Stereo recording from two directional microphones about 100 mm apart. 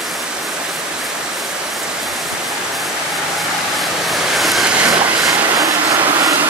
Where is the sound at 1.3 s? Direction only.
Centre (ahead or behind).